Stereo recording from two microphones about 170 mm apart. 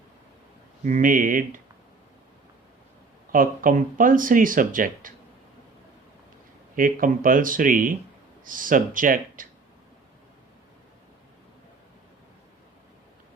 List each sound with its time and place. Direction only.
0.9 s speech: 50° right (ahead or behind)
3.3 s speech: 55° right (ahead or behind)
6.7 s speech: 55° right (ahead or behind)